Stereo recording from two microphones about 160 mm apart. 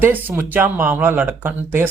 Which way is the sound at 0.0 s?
10° right (ahead or behind).